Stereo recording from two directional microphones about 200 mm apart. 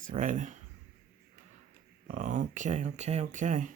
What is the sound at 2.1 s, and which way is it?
Speech, 40° right (ahead or behind).